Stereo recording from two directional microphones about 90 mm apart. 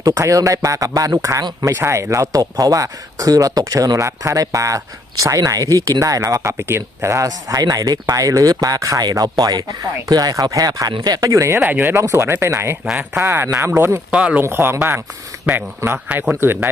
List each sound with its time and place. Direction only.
0.0 s speech: 40° right (ahead or behind)
11.6 s speech: 20° right (ahead or behind)
14.1 s speech: 15° right (ahead or behind)
14.4 s speech: 30° right (ahead or behind)